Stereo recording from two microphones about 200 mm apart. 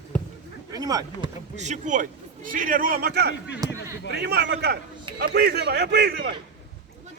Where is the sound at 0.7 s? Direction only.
20° right (ahead or behind).